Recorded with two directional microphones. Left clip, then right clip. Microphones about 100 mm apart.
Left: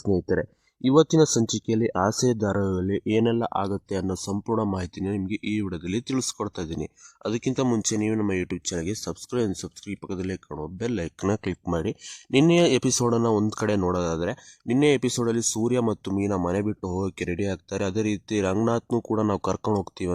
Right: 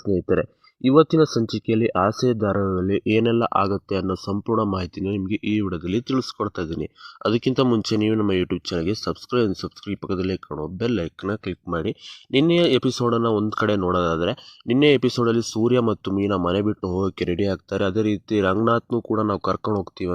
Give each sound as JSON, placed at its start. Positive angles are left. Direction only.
{"t": 0.0, "sound": "speech", "side_deg": 15}
{"t": 7.2, "sound": "speech", "side_deg": -25}
{"t": 8.6, "sound": "speech", "side_deg": -5}
{"t": 11.2, "sound": "speech", "side_deg": 25}